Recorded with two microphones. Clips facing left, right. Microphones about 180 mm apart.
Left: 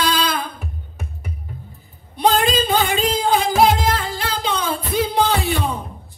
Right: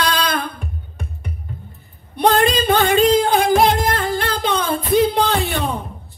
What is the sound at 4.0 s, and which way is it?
Music, 55° right (ahead or behind).